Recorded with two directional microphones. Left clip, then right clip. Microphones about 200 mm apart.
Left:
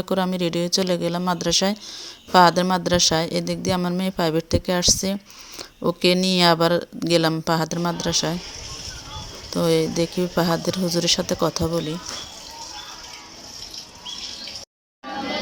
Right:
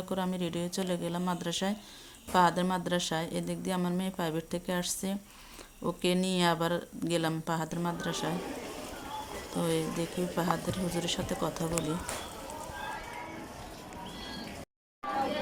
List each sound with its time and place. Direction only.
0.0 s speech: 40° left (ahead or behind)
9.6 s speech: 40° left (ahead or behind)